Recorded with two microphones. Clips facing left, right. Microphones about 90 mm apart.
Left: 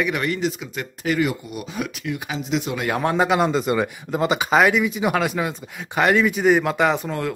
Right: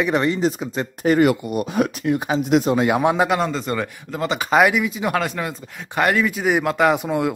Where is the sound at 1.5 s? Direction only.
50° right (ahead or behind).